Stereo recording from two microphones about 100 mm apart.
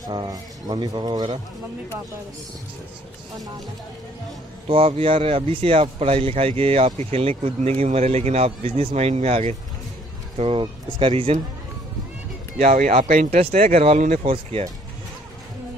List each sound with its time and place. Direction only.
0.0 s speech: 45° right (ahead or behind)
4.6 s speech: 70° right (ahead or behind); by 9.6 s 90° right
10.3 s speech: 65° right (ahead or behind)
12.9 s speech: 90° right